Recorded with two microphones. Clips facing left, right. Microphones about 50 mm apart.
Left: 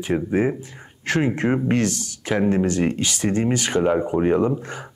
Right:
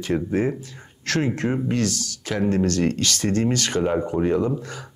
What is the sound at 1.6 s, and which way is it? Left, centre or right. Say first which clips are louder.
Speech: left 3 dB; left.